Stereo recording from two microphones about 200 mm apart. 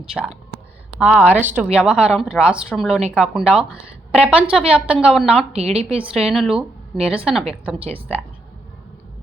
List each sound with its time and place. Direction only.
0.0 s a woman's voice: 5° right (ahead or behind)
5.5 s a woman's voice: 30° right (ahead or behind)
6.1 s a woman's voice: centre (ahead or behind)